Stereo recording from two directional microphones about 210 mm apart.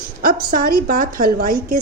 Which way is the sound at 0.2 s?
45° right (ahead or behind).